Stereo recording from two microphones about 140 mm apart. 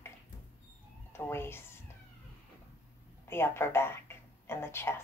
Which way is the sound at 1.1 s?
15° left (ahead or behind).